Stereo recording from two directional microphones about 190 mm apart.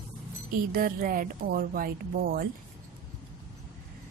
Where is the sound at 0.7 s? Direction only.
50° right (ahead or behind).